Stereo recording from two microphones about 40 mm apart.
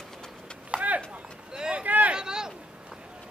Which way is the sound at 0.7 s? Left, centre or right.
Right.